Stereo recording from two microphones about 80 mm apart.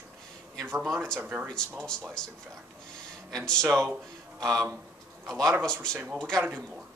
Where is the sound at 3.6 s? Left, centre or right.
Right.